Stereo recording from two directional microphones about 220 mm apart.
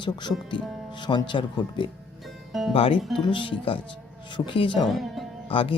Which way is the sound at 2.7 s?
25° left (ahead or behind).